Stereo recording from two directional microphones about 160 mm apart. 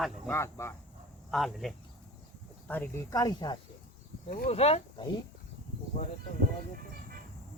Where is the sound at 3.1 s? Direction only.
25° left (ahead or behind).